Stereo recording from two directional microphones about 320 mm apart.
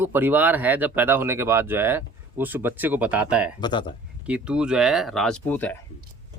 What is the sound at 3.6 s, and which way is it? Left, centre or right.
Speech, centre.